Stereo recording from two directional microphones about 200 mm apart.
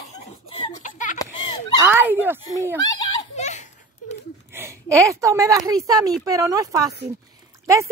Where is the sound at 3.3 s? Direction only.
35° left (ahead or behind).